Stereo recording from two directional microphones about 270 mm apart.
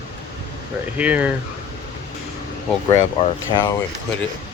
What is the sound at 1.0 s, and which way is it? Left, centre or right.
Speech, centre.